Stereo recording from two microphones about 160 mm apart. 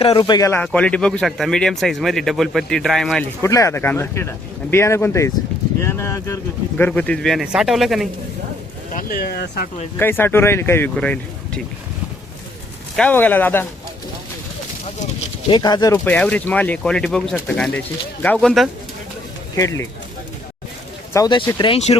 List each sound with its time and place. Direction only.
0.0 s speech: 30° left (ahead or behind)
0.6 s speech: 5° left (ahead or behind)
3.4 s speech: 20° left (ahead or behind); by 8.0 s centre (ahead or behind)
9.0 s speech: 65° left (ahead or behind); by 9.6 s 85° left
10.0 s speech: 15° left (ahead or behind)
13.0 s speech: 10° left (ahead or behind)
15.4 s speech: 25° left (ahead or behind)
15.9 s speech: 10° left (ahead or behind)
19.5 s speech: 20° left (ahead or behind)
21.1 s speech: 25° left (ahead or behind)
21.6 s speech: 40° left (ahead or behind)